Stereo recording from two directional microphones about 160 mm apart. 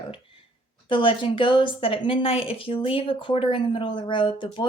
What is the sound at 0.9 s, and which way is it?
Speech, 30° left (ahead or behind).